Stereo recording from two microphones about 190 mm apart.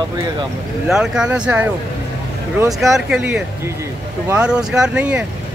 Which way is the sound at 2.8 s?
Centre (ahead or behind).